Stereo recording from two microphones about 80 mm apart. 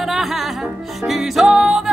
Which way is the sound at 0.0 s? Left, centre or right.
Centre.